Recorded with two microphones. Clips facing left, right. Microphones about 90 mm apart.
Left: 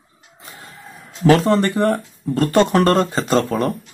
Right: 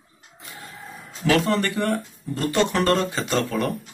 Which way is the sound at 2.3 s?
50° left (ahead or behind).